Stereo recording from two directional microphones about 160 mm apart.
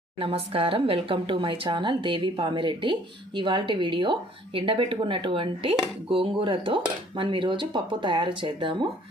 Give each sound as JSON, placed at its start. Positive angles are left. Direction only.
{"t": 0.2, "sound": "speech", "side_deg": -35}